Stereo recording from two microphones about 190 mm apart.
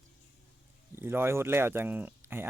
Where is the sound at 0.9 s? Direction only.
10° right (ahead or behind).